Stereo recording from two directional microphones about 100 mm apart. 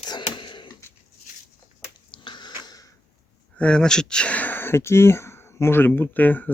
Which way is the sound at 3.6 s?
10° left (ahead or behind).